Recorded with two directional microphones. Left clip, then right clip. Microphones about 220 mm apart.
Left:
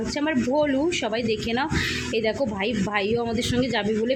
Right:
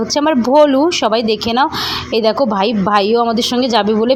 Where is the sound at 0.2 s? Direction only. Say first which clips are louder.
Right 13 dB; 25° right (ahead or behind).